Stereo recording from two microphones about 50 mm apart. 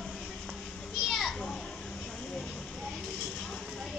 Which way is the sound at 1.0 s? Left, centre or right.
Centre.